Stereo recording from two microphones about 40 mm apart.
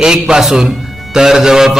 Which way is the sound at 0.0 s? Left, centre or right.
Centre.